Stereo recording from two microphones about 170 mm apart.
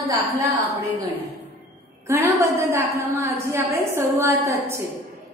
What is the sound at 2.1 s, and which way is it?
A woman's voice, 15° right (ahead or behind).